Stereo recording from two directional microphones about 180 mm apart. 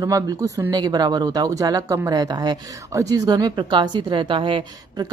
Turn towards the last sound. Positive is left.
turn(degrees=-25)  # may be behind; listen again after turning